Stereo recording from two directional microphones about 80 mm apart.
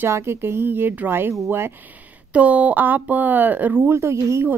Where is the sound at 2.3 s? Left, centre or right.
Centre.